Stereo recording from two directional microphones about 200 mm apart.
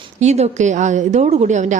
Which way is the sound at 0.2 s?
35° right (ahead or behind).